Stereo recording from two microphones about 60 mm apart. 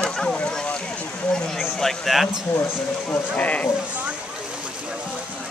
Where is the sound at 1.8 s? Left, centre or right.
Centre.